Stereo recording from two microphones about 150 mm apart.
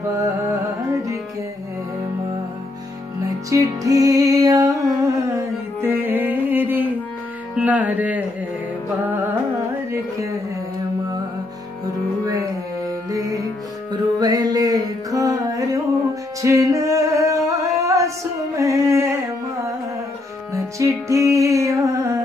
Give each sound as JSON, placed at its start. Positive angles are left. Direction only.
{"t": 0.1, "sound": "music", "side_deg": -20}
{"t": 3.3, "sound": "music", "side_deg": -20}
{"t": 12.3, "sound": "music", "side_deg": -20}
{"t": 14.2, "sound": "mantra", "side_deg": -25}
{"t": 16.4, "sound": "music", "side_deg": -20}